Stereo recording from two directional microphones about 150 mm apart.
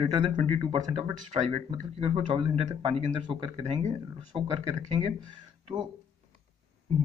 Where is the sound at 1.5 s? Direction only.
40° right (ahead or behind).